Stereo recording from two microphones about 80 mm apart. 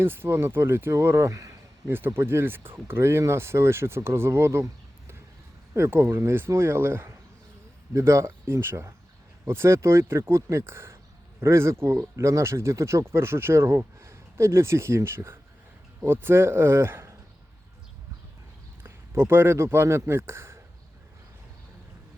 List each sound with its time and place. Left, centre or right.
0.0 s speech: right
1.9 s speech: right
18.8 s speech: right